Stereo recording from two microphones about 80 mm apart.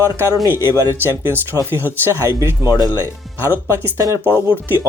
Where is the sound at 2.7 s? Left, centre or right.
Left.